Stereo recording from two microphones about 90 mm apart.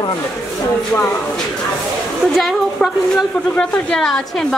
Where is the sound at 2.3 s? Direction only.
Centre (ahead or behind).